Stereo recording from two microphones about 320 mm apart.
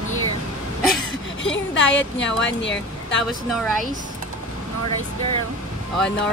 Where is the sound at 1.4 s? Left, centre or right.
Left.